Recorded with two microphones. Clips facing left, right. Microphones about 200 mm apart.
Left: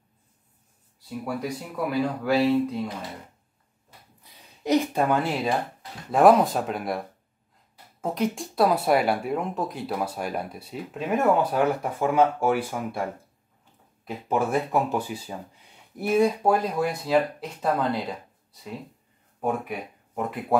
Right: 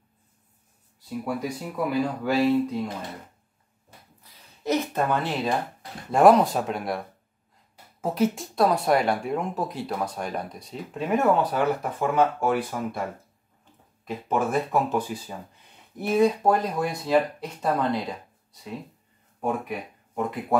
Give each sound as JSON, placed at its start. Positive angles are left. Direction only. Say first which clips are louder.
{"t": 1.0, "sound": "speech", "louder": "right 1 dB", "side_deg": 0}
{"t": 4.2, "sound": "a sound", "louder": "left 2 dB", "side_deg": 15}
{"t": 6.1, "sound": "speech", "louder": "even", "side_deg": 0}
{"t": 14.3, "sound": "speech", "louder": "even", "side_deg": 5}